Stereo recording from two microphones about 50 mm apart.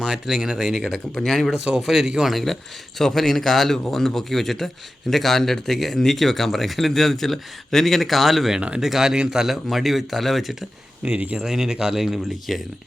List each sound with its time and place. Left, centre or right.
0.0 s speech: centre
1.1 s a man's voice: centre
1.6 s speech: centre
3.0 s a man's voice: centre
9.6 s speech: centre
11.0 s speech: right
11.4 s speech: centre